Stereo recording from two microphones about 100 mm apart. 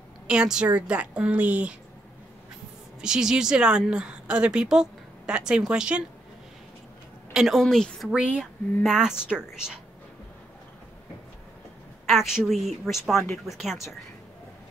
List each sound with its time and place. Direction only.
0.3 s a woman's voice: 10° right (ahead or behind)
3.0 s a woman's voice: 5° right (ahead or behind)
7.3 s speech: centre (ahead or behind)
8.1 s a woman's voice: 10° right (ahead or behind)
12.1 s speech: 5° right (ahead or behind)